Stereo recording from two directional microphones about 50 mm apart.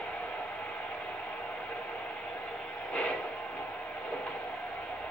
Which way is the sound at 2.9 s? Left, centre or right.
Left.